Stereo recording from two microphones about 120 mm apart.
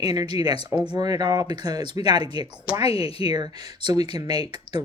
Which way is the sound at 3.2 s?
35° right (ahead or behind).